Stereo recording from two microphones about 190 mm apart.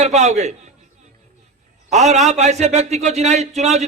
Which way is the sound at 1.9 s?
35° right (ahead or behind).